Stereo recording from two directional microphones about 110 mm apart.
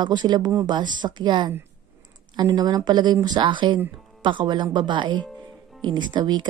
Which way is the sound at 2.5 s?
35° right (ahead or behind).